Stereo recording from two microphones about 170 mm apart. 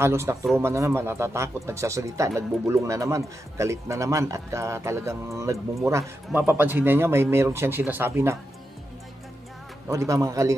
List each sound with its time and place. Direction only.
0.0 s speech: 15° right (ahead or behind)
9.8 s a man's voice: 20° right (ahead or behind)